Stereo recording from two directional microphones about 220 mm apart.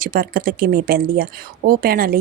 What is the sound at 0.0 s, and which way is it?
Speech, 40° right (ahead or behind).